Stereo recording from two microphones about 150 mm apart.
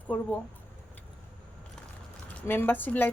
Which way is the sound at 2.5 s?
15° left (ahead or behind).